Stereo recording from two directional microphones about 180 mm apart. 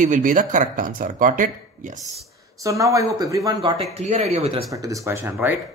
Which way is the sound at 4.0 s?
40° right (ahead or behind).